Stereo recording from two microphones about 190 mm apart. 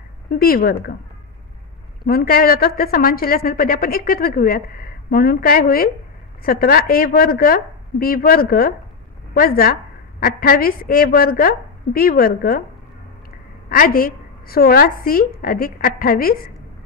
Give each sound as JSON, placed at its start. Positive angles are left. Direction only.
{"t": 0.3, "sound": "a woman's voice", "side_deg": 50}
{"t": 2.0, "sound": "a woman's voice", "side_deg": 50}
{"t": 13.7, "sound": "a woman's voice", "side_deg": 50}